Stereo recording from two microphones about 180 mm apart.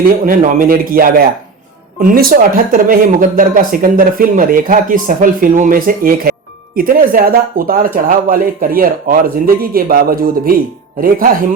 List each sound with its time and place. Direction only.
0.3 s speech: 55° right (ahead or behind)